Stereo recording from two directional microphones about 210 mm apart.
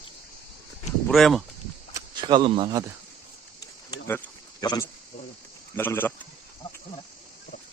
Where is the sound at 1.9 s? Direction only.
20° right (ahead or behind).